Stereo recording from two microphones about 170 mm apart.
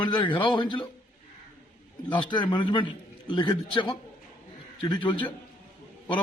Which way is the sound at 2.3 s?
30° left (ahead or behind).